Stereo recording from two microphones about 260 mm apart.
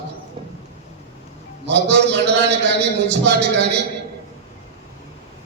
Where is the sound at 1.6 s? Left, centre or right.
Right.